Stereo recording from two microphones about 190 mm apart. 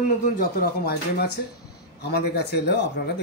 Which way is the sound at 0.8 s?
55° left (ahead or behind).